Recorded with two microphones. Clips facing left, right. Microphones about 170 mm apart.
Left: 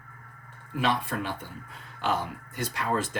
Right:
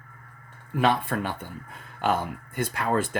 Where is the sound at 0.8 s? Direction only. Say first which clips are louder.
Right 4 dB; 55° right (ahead or behind).